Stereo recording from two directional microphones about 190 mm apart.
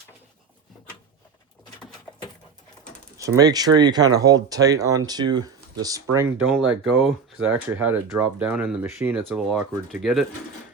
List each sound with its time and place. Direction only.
3.2 s speech: 20° right (ahead or behind)
6.1 s speech: 10° right (ahead or behind)